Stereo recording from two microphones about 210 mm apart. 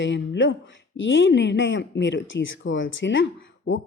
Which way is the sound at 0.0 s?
60° left (ahead or behind).